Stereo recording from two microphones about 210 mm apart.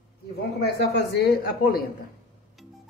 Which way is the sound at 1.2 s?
45° left (ahead or behind).